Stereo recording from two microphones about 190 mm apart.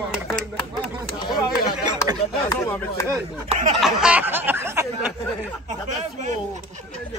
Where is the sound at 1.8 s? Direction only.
20° right (ahead or behind).